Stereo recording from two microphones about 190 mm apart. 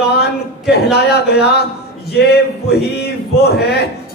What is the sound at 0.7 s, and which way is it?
A man's voice, 55° left (ahead or behind).